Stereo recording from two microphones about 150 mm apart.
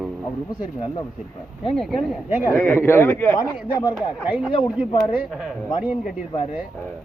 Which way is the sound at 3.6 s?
5° right (ahead or behind).